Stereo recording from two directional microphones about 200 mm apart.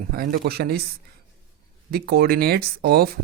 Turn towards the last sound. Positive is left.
turn(degrees=-50)  # may be behind; listen again after turning